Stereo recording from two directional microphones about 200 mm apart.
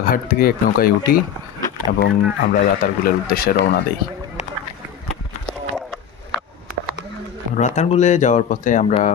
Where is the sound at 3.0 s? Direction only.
50° left (ahead or behind).